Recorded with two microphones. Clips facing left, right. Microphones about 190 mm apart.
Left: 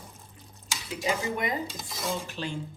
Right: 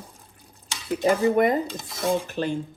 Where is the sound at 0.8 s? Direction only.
55° right (ahead or behind).